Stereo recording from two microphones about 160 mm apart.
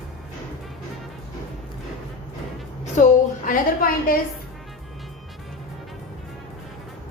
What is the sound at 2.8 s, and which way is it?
A woman's voice, 50° left (ahead or behind).